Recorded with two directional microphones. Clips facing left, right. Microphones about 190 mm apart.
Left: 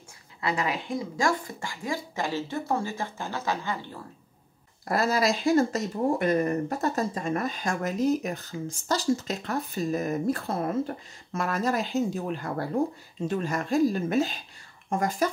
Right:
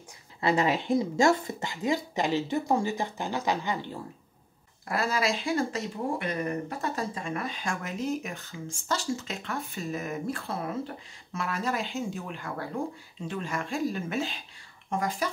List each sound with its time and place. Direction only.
0.4 s speech: 25° right (ahead or behind)
4.8 s speech: 40° left (ahead or behind)